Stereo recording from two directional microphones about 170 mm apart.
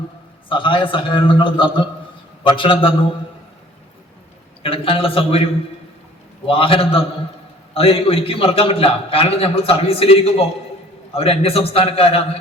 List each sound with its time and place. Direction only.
0.4 s a man's voice: 30° left (ahead or behind)
4.6 s a man's voice: 35° left (ahead or behind)